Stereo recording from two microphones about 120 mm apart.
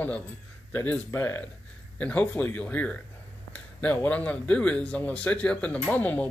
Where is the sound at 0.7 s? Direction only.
15° left (ahead or behind).